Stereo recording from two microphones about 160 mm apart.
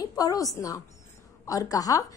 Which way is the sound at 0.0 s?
25° left (ahead or behind).